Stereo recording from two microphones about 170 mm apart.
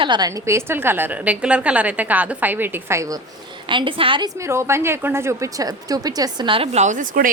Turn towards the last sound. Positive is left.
turn(degrees=-50)  # may be behind; listen again after turning